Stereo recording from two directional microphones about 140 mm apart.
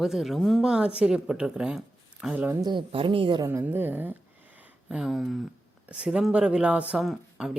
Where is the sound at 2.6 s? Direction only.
35° right (ahead or behind).